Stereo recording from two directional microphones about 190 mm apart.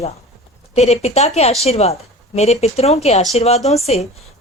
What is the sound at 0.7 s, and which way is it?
Speech, 35° left (ahead or behind).